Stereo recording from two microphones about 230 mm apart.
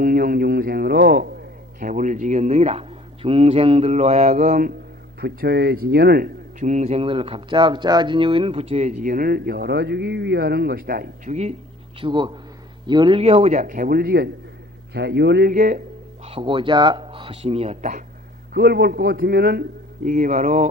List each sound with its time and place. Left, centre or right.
0.0 s speech: right
5.2 s speech: right
11.9 s a man's voice: right
16.2 s speech: right
18.5 s a man's voice: right